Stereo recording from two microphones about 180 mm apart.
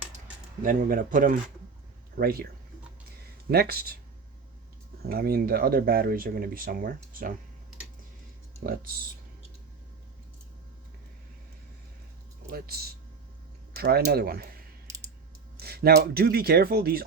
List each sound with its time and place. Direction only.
0.6 s speech: 50° right (ahead or behind)
3.5 s speech: 60° right (ahead or behind)
5.0 s speech: 55° right (ahead or behind)
8.6 s speech: 55° right (ahead or behind)
12.5 s speech: 60° right (ahead or behind)
14.8 s typing: 20° right (ahead or behind)
15.5 s speech: 60° right (ahead or behind)